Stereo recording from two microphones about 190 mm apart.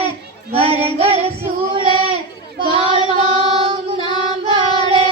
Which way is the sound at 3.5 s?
30° right (ahead or behind).